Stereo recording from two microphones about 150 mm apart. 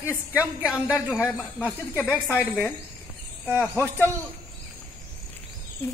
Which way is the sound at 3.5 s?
10° right (ahead or behind).